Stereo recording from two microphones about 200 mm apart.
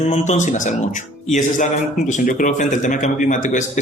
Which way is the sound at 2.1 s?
40° left (ahead or behind).